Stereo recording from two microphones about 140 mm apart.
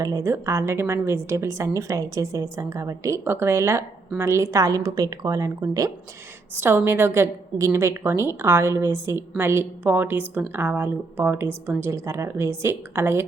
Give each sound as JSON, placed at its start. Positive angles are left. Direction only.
{"t": 0.0, "sound": "a woman's voice", "side_deg": -25}